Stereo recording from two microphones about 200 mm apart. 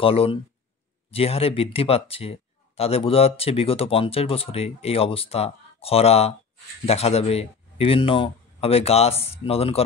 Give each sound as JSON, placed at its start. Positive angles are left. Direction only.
{"t": 0.0, "sound": "speech", "side_deg": 30}